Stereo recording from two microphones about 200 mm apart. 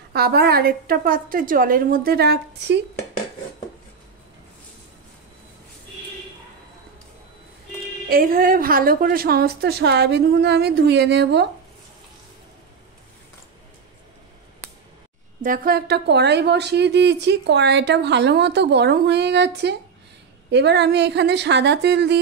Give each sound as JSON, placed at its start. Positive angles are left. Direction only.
{"t": 0.1, "sound": "a woman's voice", "side_deg": -50}
{"t": 8.1, "sound": "a woman's voice", "side_deg": -45}
{"t": 15.4, "sound": "a woman's voice", "side_deg": -45}